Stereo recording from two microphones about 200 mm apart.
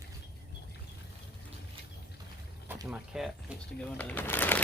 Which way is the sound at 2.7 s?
10° right (ahead or behind).